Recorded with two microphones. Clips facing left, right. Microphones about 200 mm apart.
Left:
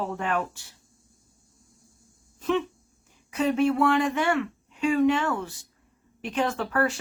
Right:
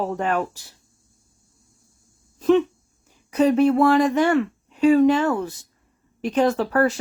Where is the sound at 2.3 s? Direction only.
35° right (ahead or behind).